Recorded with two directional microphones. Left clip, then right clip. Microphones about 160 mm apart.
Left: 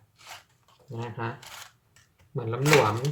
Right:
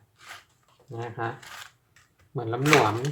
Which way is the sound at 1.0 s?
20° right (ahead or behind).